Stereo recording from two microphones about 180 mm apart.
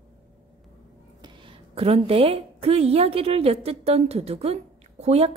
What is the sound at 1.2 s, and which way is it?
A woman's voice, 25° right (ahead or behind).